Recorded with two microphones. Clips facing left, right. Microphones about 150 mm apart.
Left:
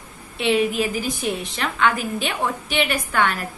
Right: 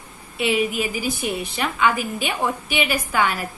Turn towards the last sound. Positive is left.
turn(degrees=-5)  # may be behind; listen again after turning